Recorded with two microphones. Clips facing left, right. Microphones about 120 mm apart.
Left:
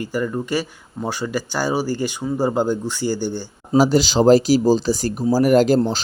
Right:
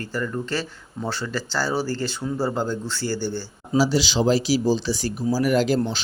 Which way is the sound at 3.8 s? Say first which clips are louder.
Left 5 dB; 50° left (ahead or behind).